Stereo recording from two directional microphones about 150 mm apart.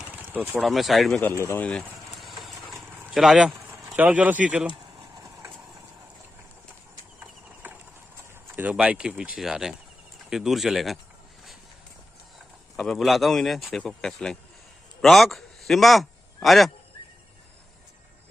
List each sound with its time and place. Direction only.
0.0 s a sound: 10° right (ahead or behind)
0.6 s speech: centre (ahead or behind)
1.2 s speech: 20° left (ahead or behind)
3.1 s speech: 5° right (ahead or behind)
7.6 s clip-clop: 10° right (ahead or behind)
8.5 s speech: 10° right (ahead or behind)
12.4 s speech: centre (ahead or behind)